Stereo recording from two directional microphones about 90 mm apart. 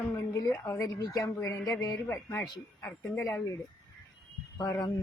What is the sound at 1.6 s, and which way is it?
A woman's voice, 40° left (ahead or behind).